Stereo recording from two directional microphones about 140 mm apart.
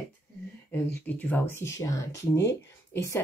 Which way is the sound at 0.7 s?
10° left (ahead or behind).